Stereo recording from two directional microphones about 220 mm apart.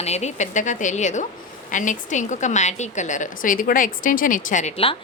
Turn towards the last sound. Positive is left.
turn(degrees=30)  # may be behind; listen again after turning